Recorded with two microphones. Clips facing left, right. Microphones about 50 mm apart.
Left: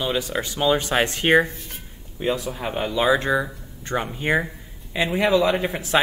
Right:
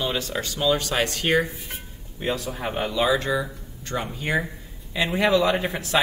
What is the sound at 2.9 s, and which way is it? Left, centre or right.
Speech, left.